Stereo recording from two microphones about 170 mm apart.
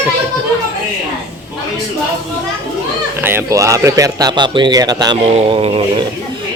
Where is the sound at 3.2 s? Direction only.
15° right (ahead or behind); by 6.1 s 35° right (ahead or behind).